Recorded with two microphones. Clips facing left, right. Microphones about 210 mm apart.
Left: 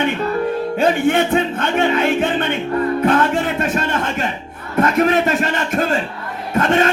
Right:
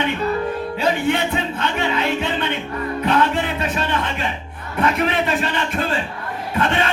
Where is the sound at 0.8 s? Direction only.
50° left (ahead or behind).